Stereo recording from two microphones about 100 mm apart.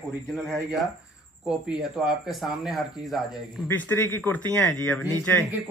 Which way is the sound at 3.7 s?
20° left (ahead or behind).